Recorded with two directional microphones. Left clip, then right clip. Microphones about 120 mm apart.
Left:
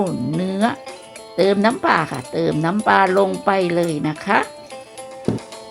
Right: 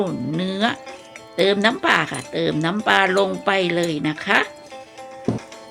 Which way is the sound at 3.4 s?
25° left (ahead or behind).